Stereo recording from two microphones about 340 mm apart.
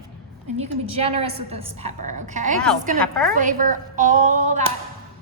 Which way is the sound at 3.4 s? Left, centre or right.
Right.